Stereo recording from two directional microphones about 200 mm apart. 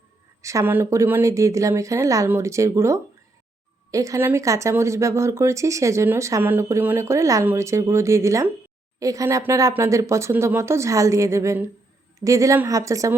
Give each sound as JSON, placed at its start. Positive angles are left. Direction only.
{"t": 0.4, "sound": "speech", "side_deg": -15}